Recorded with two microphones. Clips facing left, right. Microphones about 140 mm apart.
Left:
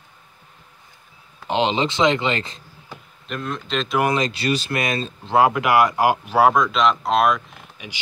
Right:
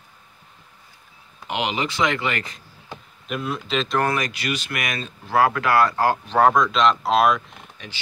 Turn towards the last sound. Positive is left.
turn(degrees=10)  # may be behind; listen again after turning